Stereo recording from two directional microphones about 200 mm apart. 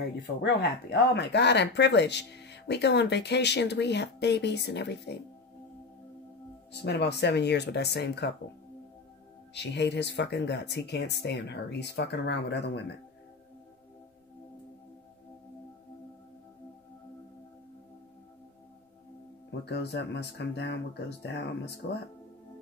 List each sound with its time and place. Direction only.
0.4 s speech: 55° left (ahead or behind)
6.7 s speech: 55° left (ahead or behind)
9.5 s speech: 60° left (ahead or behind)
19.6 s speech: 55° left (ahead or behind)